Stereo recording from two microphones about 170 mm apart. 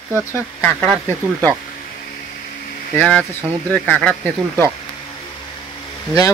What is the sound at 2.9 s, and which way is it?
Speech, 5° left (ahead or behind).